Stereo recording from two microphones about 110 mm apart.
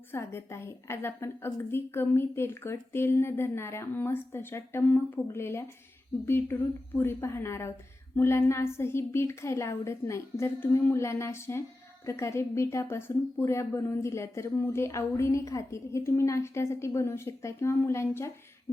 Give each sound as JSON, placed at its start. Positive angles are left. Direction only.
{"t": 0.1, "sound": "a woman's voice", "side_deg": 25}